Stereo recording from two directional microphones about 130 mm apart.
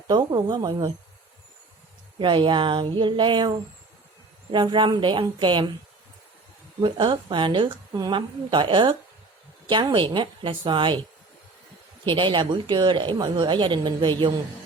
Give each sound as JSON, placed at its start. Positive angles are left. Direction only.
{"t": 0.1, "sound": "a woman's voice", "side_deg": -35}
{"t": 2.1, "sound": "a woman's voice", "side_deg": -40}
{"t": 6.8, "sound": "a woman's voice", "side_deg": -40}
{"t": 12.0, "sound": "a woman's voice", "side_deg": -40}